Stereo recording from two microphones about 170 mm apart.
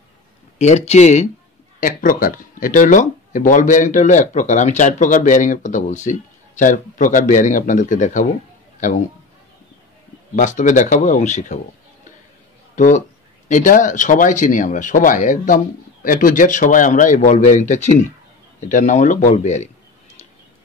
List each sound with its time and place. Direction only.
0.6 s speech: 40° left (ahead or behind)
1.8 s a man's voice: 55° left (ahead or behind)
10.3 s speech: 50° left (ahead or behind)
12.7 s speech: 45° left (ahead or behind)